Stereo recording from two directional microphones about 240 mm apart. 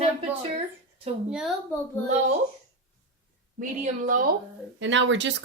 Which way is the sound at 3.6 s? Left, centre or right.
Right.